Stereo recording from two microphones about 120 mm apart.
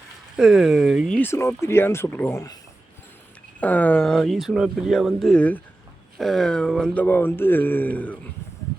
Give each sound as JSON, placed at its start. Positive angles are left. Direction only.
{"t": 0.3, "sound": "speech", "side_deg": -5}
{"t": 1.1, "sound": "speech", "side_deg": 20}
{"t": 3.6, "sound": "speech", "side_deg": 15}
{"t": 5.4, "sound": "speech", "side_deg": 15}
{"t": 6.1, "sound": "speech", "side_deg": 0}